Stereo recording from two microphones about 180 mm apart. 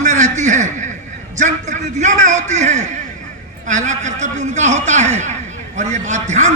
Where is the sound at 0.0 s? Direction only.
40° right (ahead or behind).